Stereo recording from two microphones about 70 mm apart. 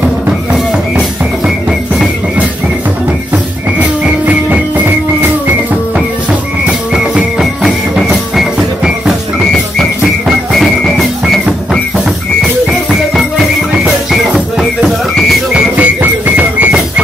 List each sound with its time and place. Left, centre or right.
0.5 s music: centre
4.0 s music: centre
6.6 s music: centre
9.5 s music: centre
14.1 s music: centre
15.5 s music: right